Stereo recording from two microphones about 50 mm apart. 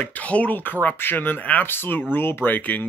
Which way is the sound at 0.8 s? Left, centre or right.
Left.